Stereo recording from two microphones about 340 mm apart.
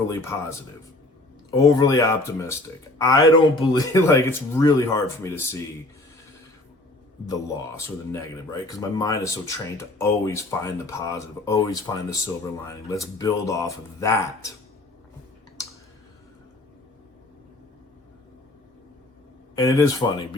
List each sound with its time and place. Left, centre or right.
0.1 s speech: centre
1.5 s speech: centre
7.3 s speech: centre
19.5 s speech: centre